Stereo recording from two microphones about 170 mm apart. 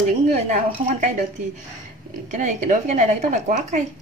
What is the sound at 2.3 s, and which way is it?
Speech, 45° right (ahead or behind).